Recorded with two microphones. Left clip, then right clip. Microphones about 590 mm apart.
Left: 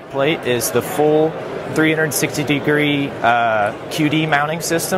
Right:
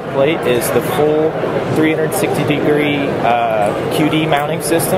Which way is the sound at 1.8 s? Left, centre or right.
Left.